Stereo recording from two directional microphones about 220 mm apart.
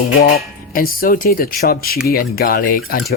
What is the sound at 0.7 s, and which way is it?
Speech, 40° left (ahead or behind).